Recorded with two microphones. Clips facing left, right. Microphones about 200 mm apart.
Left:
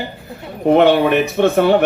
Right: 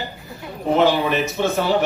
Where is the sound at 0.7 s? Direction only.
60° left (ahead or behind).